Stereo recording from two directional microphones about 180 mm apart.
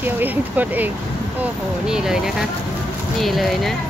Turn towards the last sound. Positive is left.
turn(degrees=0)  # may be behind; listen again after turning